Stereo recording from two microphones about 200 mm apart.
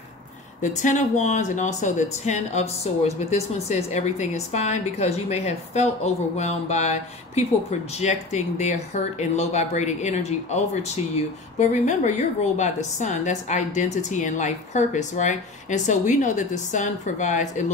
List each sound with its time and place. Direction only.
0.6 s speech: 40° left (ahead or behind)